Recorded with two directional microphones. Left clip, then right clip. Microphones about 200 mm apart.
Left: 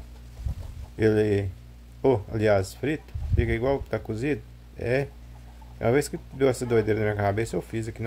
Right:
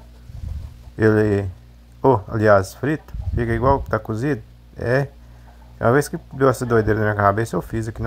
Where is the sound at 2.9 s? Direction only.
65° right (ahead or behind).